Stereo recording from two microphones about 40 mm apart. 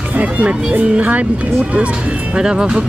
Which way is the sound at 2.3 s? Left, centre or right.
Right.